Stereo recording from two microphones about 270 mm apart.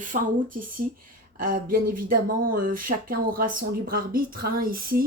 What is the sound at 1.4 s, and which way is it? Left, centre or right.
A woman's voice, right.